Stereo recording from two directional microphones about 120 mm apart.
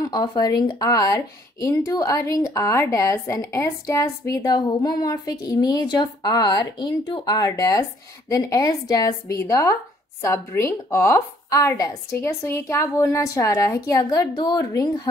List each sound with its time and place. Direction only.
0.1 s a woman's voice: 35° left (ahead or behind)